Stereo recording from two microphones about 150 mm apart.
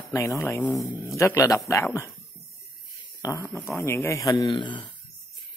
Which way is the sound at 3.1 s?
25° left (ahead or behind).